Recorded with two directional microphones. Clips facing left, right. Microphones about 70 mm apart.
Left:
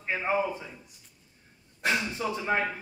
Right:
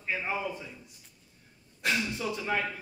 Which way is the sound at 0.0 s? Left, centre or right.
Left.